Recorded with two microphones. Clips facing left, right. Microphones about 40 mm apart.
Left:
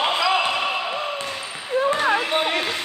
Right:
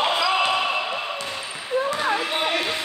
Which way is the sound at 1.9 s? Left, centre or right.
Left.